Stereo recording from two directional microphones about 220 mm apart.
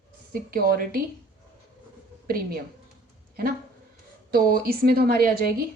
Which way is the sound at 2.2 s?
40° right (ahead or behind).